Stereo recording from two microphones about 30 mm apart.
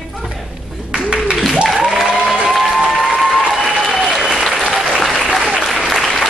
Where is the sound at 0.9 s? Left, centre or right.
Right.